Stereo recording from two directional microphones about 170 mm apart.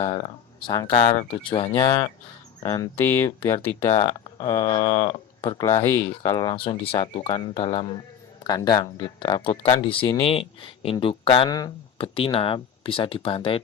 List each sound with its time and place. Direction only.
0.0 s speech: 20° left (ahead or behind)
3.9 s speech: 35° left (ahead or behind)
5.5 s speech: 15° left (ahead or behind); by 13.6 s 30° left (ahead or behind)